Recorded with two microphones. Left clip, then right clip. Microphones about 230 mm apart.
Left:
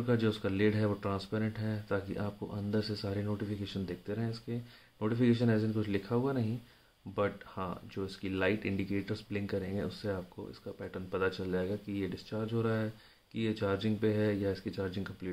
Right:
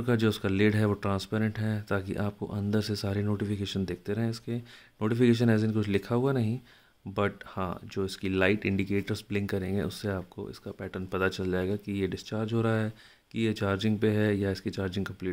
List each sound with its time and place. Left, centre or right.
0.0 s speech: right